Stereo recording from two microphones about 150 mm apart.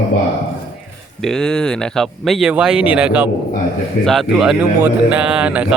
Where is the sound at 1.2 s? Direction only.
5° left (ahead or behind).